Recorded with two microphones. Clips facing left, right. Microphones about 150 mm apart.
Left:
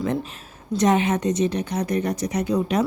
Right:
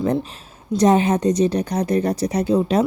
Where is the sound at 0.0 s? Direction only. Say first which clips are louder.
Right 4 dB; 35° right (ahead or behind).